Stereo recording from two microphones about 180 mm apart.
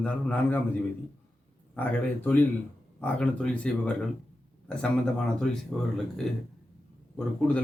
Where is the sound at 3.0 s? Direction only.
5° left (ahead or behind).